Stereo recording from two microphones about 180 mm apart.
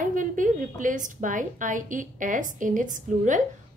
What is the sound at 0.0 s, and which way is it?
A woman's voice, 45° right (ahead or behind).